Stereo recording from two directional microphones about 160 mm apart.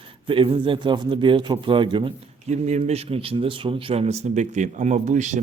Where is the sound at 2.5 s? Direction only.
45° right (ahead or behind).